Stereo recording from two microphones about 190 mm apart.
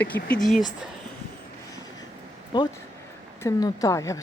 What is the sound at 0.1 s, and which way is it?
Speech, 5° left (ahead or behind).